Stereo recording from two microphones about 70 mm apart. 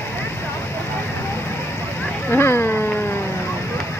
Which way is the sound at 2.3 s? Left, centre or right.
Left.